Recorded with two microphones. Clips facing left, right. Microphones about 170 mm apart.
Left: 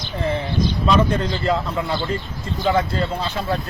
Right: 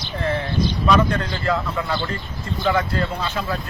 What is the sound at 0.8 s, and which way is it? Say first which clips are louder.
Speech: even; 20° left (ahead or behind).